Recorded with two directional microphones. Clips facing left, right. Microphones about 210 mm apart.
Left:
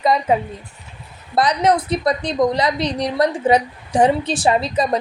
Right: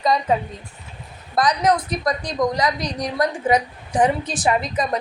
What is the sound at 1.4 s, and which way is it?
A woman's voice, 25° left (ahead or behind).